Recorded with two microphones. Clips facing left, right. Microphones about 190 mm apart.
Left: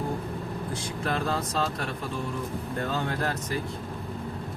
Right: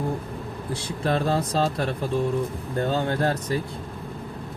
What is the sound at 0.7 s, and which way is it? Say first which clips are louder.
Speech: right 7 dB; 30° right (ahead or behind).